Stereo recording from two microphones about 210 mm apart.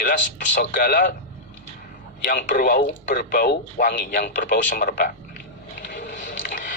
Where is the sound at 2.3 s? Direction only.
40° left (ahead or behind).